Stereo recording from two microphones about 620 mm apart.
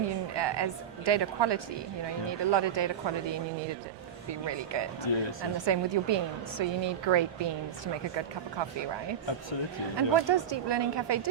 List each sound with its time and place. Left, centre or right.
0.3 s a woman's voice: right
5.1 s speech: left
5.5 s a woman's voice: right
10.2 s a woman's voice: right